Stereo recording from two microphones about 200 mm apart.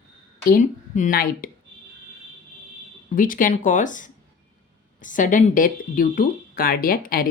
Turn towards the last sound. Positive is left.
turn(degrees=45)  # may be behind; listen again after turning